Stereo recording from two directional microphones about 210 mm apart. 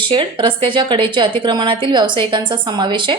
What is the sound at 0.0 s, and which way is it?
Speech, 25° right (ahead or behind).